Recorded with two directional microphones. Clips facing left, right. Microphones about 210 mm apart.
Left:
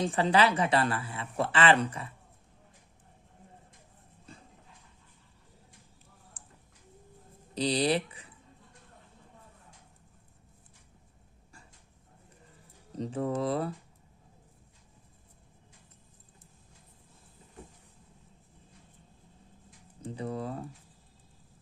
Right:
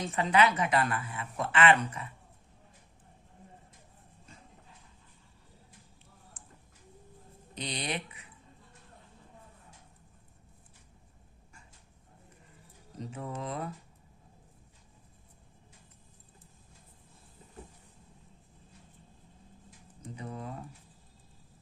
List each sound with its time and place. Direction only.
0.0 s a woman's voice: 30° left (ahead or behind)
6.4 s a sound: 35° left (ahead or behind)
7.5 s a woman's voice: 35° left (ahead or behind)
13.0 s a woman's voice: 35° left (ahead or behind)
20.0 s a woman's voice: 30° left (ahead or behind)